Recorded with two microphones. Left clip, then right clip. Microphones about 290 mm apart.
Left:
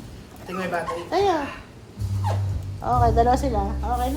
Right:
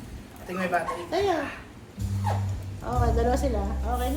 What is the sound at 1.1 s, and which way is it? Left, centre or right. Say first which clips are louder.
Speech: left 5 dB; left.